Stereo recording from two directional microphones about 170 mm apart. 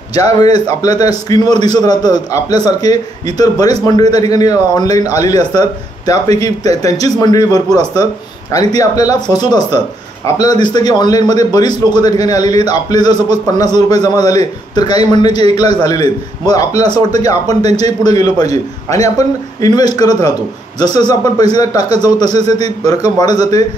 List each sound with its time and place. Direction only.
0.1 s a man's voice: 20° left (ahead or behind)